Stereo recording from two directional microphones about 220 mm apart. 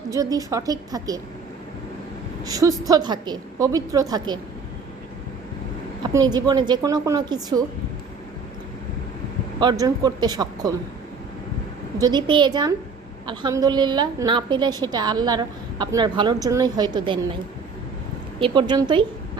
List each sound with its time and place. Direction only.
0.1 s a woman's voice: 15° right (ahead or behind)
2.4 s a woman's voice: 15° right (ahead or behind)
6.0 s a woman's voice: 20° right (ahead or behind)
9.6 s a woman's voice: 20° right (ahead or behind)
11.9 s a woman's voice: 20° right (ahead or behind)
18.3 s a woman's voice: 25° right (ahead or behind)